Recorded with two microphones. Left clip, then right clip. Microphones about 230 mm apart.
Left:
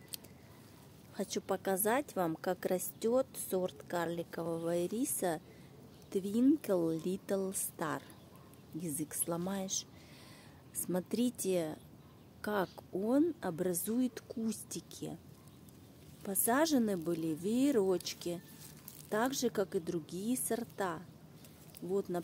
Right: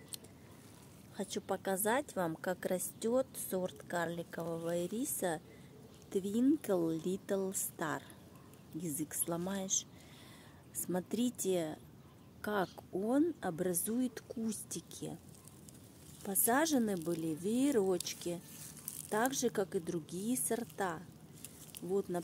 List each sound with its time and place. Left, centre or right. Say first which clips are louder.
1.1 s a woman's voice: left 2 dB; centre
16.2 s speech: left 1 dB; centre
22.1 s speech: left 1 dB; centre